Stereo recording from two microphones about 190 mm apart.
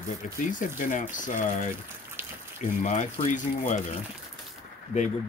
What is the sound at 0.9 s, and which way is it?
Speech, 45° left (ahead or behind).